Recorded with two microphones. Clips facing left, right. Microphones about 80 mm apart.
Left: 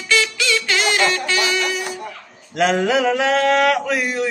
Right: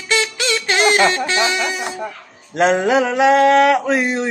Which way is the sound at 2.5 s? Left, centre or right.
Right.